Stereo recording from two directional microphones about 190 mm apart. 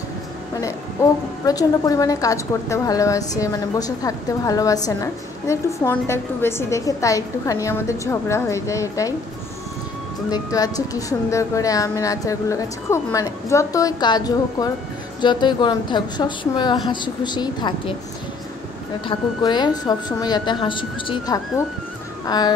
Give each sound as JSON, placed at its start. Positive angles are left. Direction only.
{"t": 1.4, "sound": "a woman's voice", "side_deg": 20}
{"t": 10.3, "sound": "a woman's voice", "side_deg": 20}
{"t": 19.0, "sound": "a woman's voice", "side_deg": 20}
{"t": 22.2, "sound": "music", "side_deg": 20}